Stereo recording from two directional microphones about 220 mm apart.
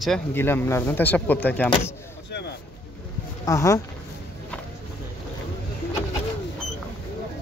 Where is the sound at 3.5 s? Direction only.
15° left (ahead or behind).